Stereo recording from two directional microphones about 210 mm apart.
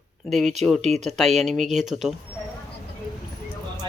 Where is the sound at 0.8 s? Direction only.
30° right (ahead or behind).